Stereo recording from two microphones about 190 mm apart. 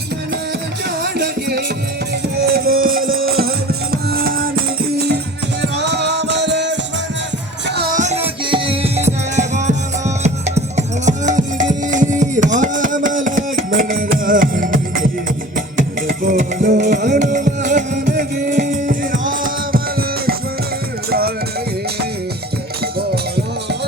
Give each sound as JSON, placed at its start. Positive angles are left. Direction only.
{"t": 1.0, "sound": "music", "side_deg": -55}
{"t": 7.9, "sound": "music", "side_deg": -35}
{"t": 22.8, "sound": "music", "side_deg": -55}